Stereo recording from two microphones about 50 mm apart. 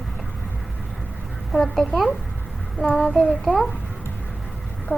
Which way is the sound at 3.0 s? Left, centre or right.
Centre.